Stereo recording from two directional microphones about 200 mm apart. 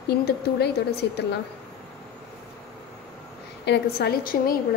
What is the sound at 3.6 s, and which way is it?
Speech, 55° left (ahead or behind).